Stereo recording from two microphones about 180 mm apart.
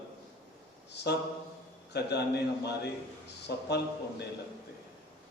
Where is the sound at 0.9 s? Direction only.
65° left (ahead or behind).